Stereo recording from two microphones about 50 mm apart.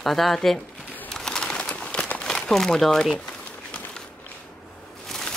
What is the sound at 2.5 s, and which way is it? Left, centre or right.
Speech, centre.